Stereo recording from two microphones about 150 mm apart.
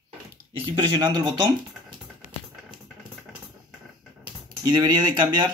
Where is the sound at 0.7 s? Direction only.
30° right (ahead or behind).